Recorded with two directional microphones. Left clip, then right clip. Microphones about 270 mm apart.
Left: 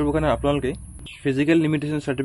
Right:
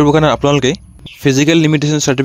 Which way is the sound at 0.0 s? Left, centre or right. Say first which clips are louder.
Right 10 dB; right.